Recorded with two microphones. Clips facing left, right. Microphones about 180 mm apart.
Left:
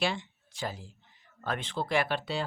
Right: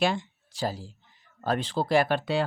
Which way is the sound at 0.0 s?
45° right (ahead or behind).